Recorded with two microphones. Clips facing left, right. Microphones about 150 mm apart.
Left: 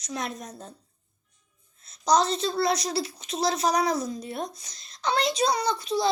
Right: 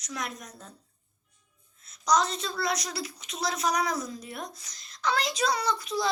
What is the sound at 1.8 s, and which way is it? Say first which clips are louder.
A woman's voice: left 3 dB; 30° left (ahead or behind).